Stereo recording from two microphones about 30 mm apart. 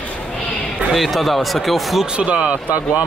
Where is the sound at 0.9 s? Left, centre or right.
Centre.